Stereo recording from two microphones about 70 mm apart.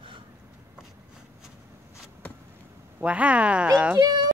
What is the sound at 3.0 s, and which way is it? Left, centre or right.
Speech, centre.